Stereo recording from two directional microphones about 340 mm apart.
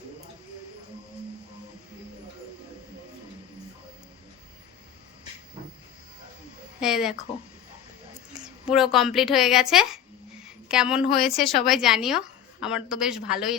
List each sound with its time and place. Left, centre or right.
6.7 s a woman's voice: centre
8.3 s a woman's voice: centre